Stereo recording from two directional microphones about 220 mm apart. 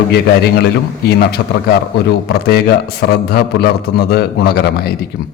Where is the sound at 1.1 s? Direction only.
45° left (ahead or behind).